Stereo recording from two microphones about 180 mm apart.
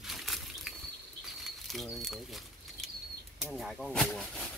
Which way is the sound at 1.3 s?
Centre (ahead or behind).